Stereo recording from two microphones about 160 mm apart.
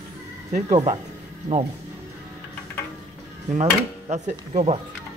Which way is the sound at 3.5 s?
45° right (ahead or behind).